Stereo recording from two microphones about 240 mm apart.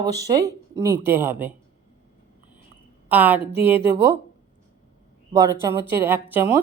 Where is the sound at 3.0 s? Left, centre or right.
Centre.